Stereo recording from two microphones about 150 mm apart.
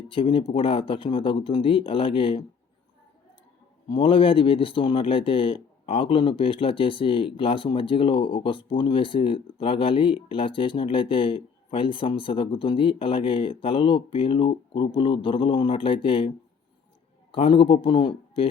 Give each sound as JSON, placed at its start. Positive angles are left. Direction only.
{"t": 0.1, "sound": "speech", "side_deg": 35}
{"t": 3.8, "sound": "speech", "side_deg": 35}
{"t": 17.3, "sound": "speech", "side_deg": 35}